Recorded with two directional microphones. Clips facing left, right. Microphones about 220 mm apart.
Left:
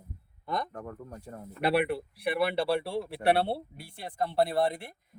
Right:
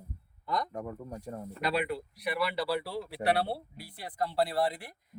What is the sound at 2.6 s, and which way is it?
Speech, 30° left (ahead or behind).